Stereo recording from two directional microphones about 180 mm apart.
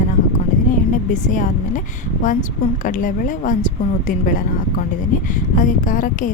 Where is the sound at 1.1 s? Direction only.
45° left (ahead or behind).